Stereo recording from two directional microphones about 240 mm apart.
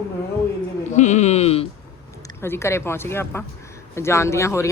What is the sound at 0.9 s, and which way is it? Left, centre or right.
Speech, left.